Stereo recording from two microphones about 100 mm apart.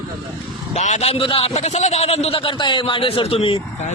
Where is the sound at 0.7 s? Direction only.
85° left; by 3.6 s 70° left (ahead or behind).